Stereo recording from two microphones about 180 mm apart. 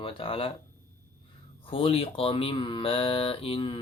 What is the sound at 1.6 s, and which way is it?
Speech, 30° left (ahead or behind).